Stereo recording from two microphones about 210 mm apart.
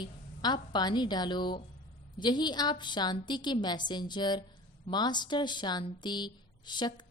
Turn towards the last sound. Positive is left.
turn(degrees=20)  # may be behind; listen again after turning